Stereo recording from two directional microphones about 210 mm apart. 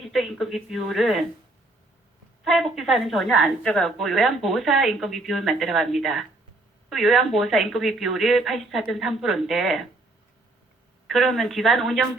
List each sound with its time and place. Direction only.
0.1 s a woman's voice: centre (ahead or behind)
2.4 s a woman's voice: centre (ahead or behind)
11.0 s a woman's voice: centre (ahead or behind)